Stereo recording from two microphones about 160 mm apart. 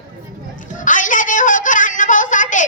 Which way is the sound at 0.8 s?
55° left (ahead or behind).